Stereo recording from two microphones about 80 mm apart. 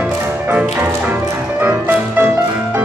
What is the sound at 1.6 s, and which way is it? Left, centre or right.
Music, right.